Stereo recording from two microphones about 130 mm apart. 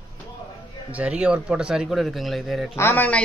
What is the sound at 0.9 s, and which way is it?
Speech, 10° right (ahead or behind).